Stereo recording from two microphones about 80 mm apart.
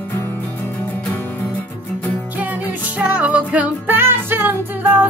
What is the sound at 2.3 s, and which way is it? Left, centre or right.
Music, right.